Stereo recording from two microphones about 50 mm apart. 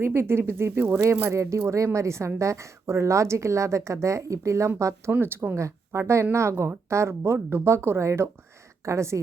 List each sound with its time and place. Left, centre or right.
0.0 s speech: right
1.2 s speech: right
2.4 s speech: right
5.2 s speech: right
5.5 s speech: right
8.8 s speech: right